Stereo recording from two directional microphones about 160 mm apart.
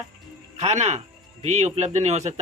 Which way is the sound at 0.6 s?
45° right (ahead or behind).